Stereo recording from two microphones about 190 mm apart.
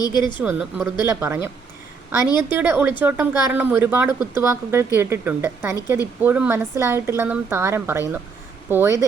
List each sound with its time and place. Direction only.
0.0 s speech: 25° left (ahead or behind)
0.4 s a woman's voice: 10° right (ahead or behind)
2.5 s a woman's voice: 10° right (ahead or behind)